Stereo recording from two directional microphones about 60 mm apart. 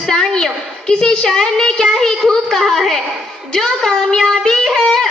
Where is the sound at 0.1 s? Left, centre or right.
Centre.